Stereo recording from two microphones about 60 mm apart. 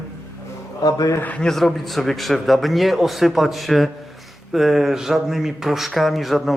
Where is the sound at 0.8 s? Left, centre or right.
Left.